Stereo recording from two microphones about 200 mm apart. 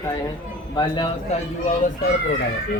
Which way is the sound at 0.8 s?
25° left (ahead or behind).